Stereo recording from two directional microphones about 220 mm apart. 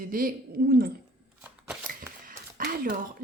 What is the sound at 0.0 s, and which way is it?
Speech, 40° right (ahead or behind).